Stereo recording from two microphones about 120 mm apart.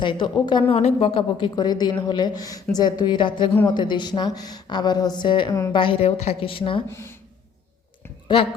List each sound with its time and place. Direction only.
0.0 s a woman's voice: 40° left (ahead or behind)
0.8 s a woman's voice: 60° left (ahead or behind)
6.9 s speech: 20° left (ahead or behind)